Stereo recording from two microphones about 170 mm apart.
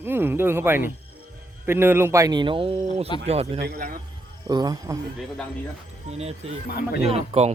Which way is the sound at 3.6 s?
70° right (ahead or behind).